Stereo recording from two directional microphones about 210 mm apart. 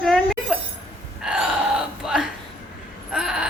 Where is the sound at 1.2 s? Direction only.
5° right (ahead or behind).